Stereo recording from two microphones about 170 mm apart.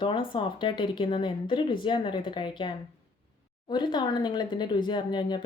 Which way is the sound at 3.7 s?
25° left (ahead or behind).